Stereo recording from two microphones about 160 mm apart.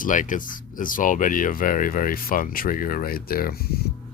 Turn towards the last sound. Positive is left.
turn(degrees=70)  # may be behind; listen again after turning